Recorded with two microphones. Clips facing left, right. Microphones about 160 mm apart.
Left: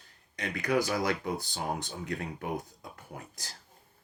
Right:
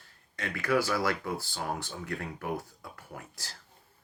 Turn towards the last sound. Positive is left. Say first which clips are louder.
# even
turn(degrees=20)  # may be behind; listen again after turning